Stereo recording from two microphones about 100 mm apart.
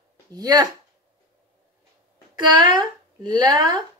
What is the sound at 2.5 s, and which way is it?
Speech, 45° right (ahead or behind).